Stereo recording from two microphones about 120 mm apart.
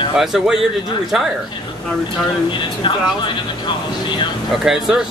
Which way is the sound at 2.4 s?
40° left (ahead or behind).